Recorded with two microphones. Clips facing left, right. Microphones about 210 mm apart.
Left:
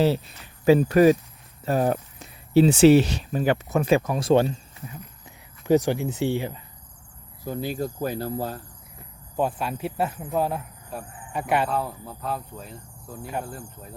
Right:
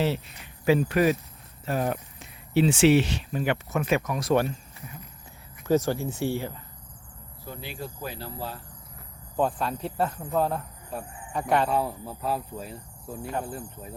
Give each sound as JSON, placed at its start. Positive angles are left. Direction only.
{"t": 0.0, "sound": "speech", "side_deg": 35}
{"t": 5.6, "sound": "speech", "side_deg": 15}
{"t": 7.4, "sound": "speech", "side_deg": 45}
{"t": 9.4, "sound": "speech", "side_deg": 5}